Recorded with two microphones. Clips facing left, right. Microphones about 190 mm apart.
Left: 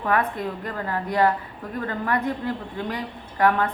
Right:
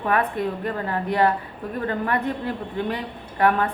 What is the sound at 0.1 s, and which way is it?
A woman's voice, 25° right (ahead or behind).